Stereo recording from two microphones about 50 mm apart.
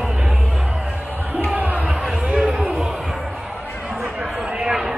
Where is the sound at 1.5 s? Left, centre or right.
Right.